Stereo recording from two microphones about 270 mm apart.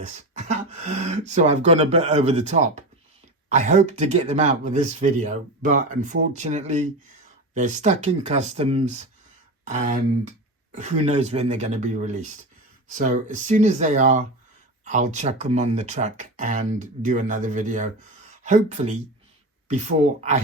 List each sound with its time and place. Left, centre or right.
0.0 s speech: right